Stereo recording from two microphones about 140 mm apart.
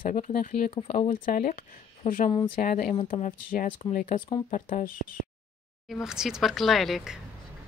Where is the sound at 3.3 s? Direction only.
80° left.